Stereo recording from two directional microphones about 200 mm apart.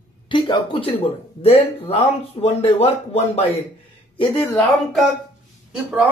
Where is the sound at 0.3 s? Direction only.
25° left (ahead or behind).